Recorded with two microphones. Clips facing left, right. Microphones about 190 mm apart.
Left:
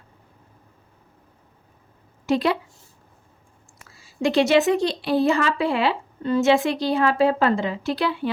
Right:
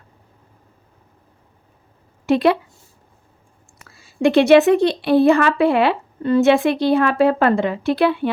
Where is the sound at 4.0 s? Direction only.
60° right (ahead or behind).